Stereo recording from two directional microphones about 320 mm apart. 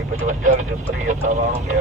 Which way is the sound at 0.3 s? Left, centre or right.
Right.